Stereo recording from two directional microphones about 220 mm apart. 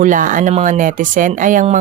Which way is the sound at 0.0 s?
35° right (ahead or behind).